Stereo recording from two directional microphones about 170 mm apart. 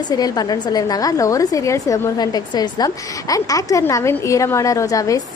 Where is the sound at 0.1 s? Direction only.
20° left (ahead or behind).